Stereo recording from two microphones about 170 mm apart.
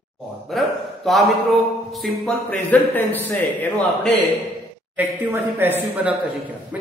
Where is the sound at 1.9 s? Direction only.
Centre (ahead or behind).